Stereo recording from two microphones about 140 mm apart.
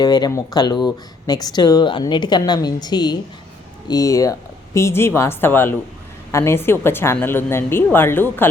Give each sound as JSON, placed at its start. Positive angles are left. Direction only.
{"t": 0.0, "sound": "a woman's voice", "side_deg": 30}